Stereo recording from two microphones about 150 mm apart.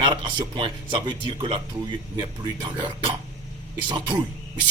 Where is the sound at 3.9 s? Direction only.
30° right (ahead or behind).